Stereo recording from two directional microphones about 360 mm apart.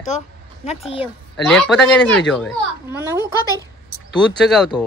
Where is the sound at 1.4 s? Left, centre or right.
Centre.